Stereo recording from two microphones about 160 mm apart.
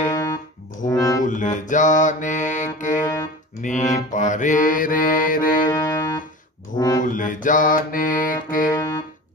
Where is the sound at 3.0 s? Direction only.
15° left (ahead or behind).